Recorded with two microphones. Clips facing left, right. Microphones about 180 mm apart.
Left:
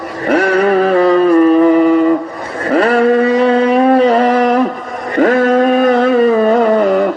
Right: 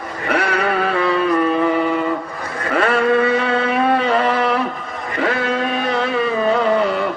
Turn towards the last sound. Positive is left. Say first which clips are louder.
# left 7 dB
turn(degrees=45)  # may be behind; listen again after turning